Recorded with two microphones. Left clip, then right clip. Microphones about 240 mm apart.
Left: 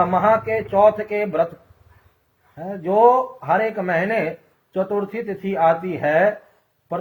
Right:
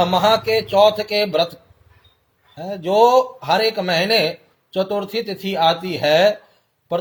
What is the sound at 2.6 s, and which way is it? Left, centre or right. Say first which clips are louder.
Speech: right 1 dB; right.